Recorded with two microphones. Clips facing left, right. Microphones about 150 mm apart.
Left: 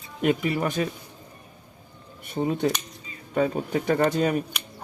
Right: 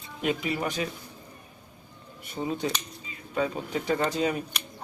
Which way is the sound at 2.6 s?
50° left (ahead or behind).